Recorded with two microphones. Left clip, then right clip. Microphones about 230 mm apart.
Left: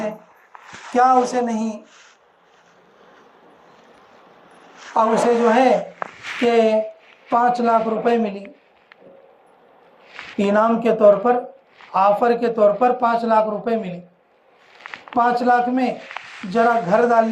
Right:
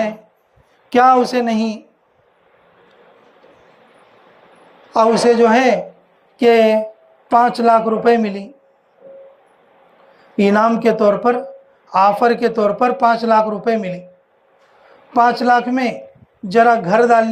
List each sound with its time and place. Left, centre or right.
0.9 s speech: right
5.2 s a man's voice: right
10.3 s a man's voice: right
15.1 s a man's voice: right